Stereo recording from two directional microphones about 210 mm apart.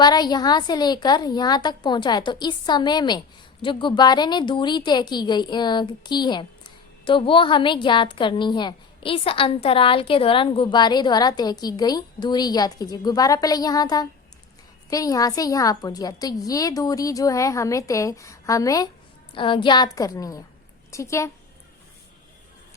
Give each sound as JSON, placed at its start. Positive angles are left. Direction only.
{"t": 0.0, "sound": "a woman's voice", "side_deg": 20}